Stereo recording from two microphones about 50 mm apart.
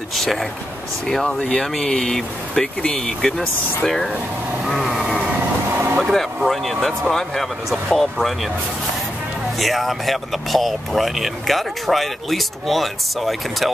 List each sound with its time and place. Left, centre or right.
0.1 s speech: centre
4.6 s vehicle: centre
4.9 s vehicle: centre
5.7 s vehicle: right
6.1 s speech: centre
9.6 s speech: centre